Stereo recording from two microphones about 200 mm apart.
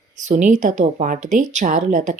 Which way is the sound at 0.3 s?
40° right (ahead or behind).